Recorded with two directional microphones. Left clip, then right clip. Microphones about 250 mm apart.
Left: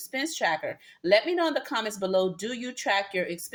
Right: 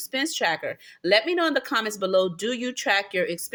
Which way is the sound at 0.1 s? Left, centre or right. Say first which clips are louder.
Right 3 dB; right.